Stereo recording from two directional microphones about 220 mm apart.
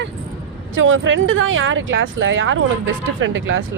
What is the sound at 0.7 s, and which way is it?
Speech, 60° right (ahead or behind).